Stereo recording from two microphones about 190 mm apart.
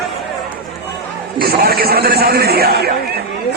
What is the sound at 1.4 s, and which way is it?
A man's voice, 55° right (ahead or behind).